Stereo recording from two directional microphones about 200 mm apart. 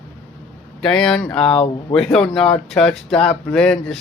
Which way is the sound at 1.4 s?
30° left (ahead or behind).